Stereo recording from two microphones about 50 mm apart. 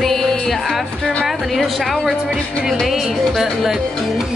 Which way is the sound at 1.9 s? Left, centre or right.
Centre.